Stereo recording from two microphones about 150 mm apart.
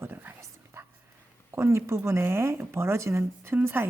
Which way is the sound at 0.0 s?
15° right (ahead or behind).